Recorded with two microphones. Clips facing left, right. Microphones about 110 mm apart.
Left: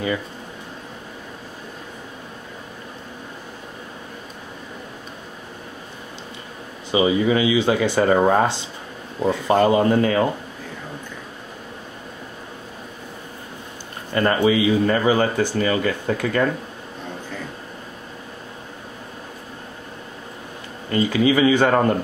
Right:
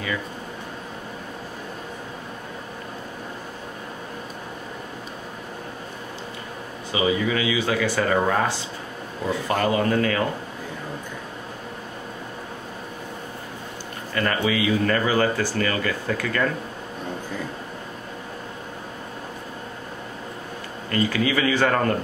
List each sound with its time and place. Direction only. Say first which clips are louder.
6.9 s speech: left 5 dB; 30° left (ahead or behind)
14.1 s speech: left 6 dB; 25° left (ahead or behind)
20.9 s speech: left 4 dB; 20° left (ahead or behind)